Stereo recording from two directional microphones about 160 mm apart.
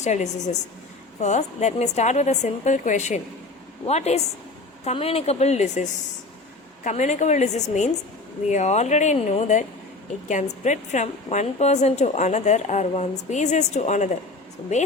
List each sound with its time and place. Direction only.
0.0 s a woman's voice: 45° left (ahead or behind)